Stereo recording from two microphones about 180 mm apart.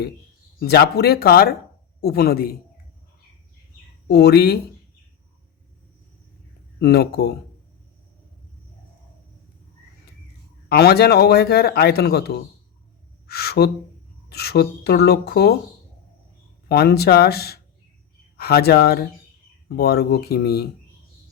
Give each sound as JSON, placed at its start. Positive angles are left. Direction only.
{"t": 0.6, "sound": "speech", "side_deg": 65}
{"t": 4.1, "sound": "speech", "side_deg": 65}
{"t": 6.7, "sound": "speech", "side_deg": 65}
{"t": 10.7, "sound": "speech", "side_deg": 65}
{"t": 16.6, "sound": "speech", "side_deg": 60}